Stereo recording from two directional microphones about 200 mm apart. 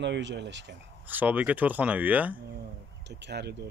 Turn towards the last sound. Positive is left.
turn(degrees=-55)  # may be behind; listen again after turning